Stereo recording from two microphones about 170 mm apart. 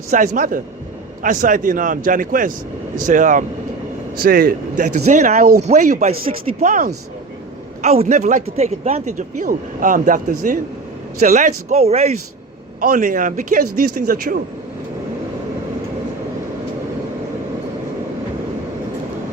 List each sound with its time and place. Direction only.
0.1 s speech: 50° right (ahead or behind)
4.2 s a man's voice: 60° right (ahead or behind)
4.9 s speech: 45° right (ahead or behind)
12.8 s a man's voice: 55° right (ahead or behind)